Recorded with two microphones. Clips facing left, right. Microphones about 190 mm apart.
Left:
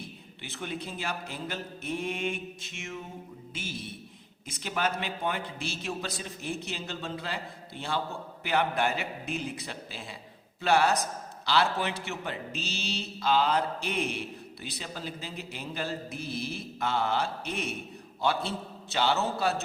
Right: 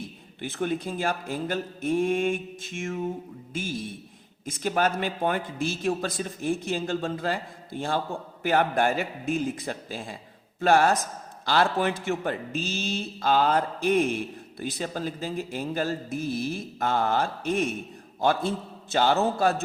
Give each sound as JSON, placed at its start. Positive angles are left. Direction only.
{"t": 0.4, "sound": "a man's voice", "side_deg": -50}